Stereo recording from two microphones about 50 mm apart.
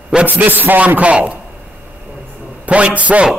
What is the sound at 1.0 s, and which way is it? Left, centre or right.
Speech, right.